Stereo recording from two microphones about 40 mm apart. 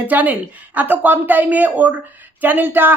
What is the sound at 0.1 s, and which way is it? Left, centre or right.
Speech, right.